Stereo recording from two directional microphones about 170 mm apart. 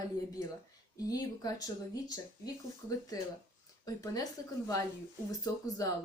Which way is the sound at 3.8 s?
20° left (ahead or behind).